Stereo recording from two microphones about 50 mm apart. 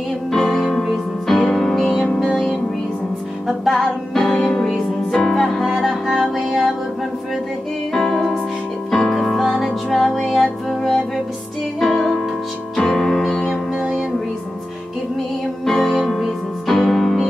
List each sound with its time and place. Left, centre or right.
0.3 s music: centre
3.7 s music: centre
7.9 s music: centre
9.7 s music: centre
10.2 s music: centre
12.7 s music: centre
13.7 s music: centre
15.6 s music: centre